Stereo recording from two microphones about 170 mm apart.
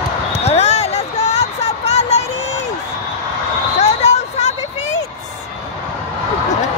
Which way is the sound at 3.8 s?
40° left (ahead or behind).